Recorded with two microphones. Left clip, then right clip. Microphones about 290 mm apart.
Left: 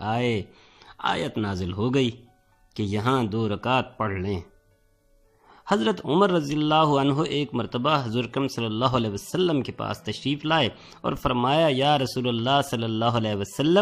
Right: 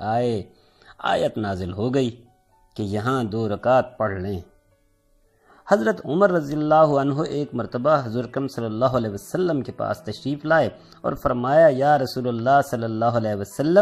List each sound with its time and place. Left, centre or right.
0.0 s speech: centre
5.7 s speech: centre
8.3 s a man's voice: centre
8.5 s speech: centre
10.6 s a man's voice: centre